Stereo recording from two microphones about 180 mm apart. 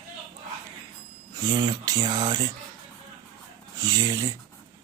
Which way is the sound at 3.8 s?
20° right (ahead or behind).